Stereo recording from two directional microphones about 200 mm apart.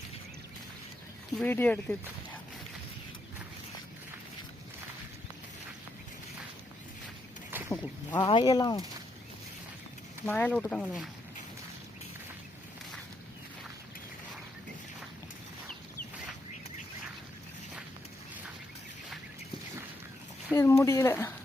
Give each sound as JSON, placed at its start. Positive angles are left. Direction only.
{"t": 1.4, "sound": "speech", "side_deg": 10}
{"t": 7.7, "sound": "a sound", "side_deg": 10}
{"t": 8.3, "sound": "speech", "side_deg": 20}
{"t": 10.2, "sound": "speech", "side_deg": 5}
{"t": 20.5, "sound": "speech", "side_deg": 15}